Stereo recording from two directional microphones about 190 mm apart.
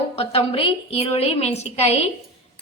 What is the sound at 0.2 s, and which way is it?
A woman's voice, 30° left (ahead or behind).